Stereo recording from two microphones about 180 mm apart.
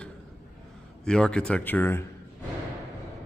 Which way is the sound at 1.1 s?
5° left (ahead or behind).